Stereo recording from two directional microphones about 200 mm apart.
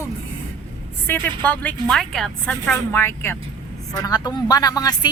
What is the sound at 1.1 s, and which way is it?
A woman's voice, 10° left (ahead or behind).